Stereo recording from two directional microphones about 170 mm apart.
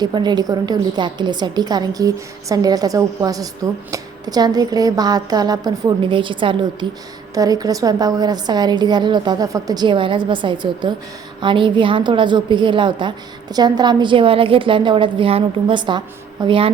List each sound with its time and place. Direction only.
0.0 s a woman's voice: 25° right (ahead or behind)